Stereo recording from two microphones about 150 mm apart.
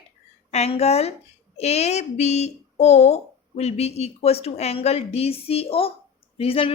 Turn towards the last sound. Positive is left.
turn(degrees=40)  # may be behind; listen again after turning